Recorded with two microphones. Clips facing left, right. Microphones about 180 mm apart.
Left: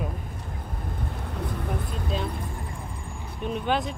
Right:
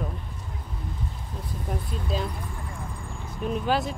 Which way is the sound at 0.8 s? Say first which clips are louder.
Left 3 dB; 60° left (ahead or behind).